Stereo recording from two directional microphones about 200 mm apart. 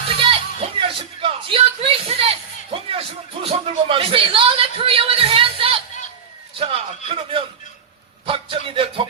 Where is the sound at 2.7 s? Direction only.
25° right (ahead or behind).